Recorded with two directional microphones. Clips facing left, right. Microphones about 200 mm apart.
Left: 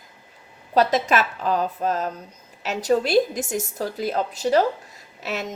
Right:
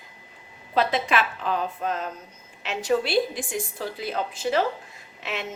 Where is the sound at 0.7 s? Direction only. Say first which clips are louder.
Left 4 dB; 40° left (ahead or behind).